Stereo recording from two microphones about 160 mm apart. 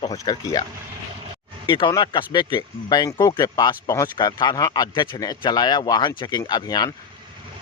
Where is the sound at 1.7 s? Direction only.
30° left (ahead or behind).